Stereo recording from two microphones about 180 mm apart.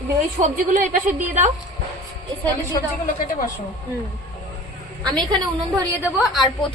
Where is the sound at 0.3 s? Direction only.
45° right (ahead or behind).